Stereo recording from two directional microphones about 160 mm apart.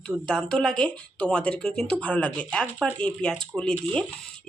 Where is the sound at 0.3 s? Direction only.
5° left (ahead or behind).